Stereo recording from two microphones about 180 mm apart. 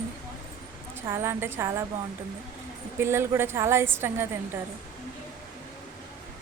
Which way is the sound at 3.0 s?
15° right (ahead or behind).